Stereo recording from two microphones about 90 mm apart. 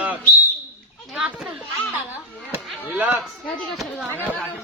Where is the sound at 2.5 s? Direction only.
20° right (ahead or behind).